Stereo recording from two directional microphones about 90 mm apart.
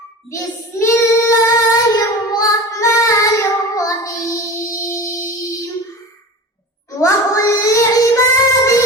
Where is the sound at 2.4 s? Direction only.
35° left (ahead or behind).